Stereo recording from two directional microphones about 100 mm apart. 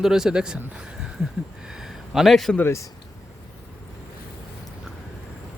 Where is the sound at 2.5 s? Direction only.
25° left (ahead or behind).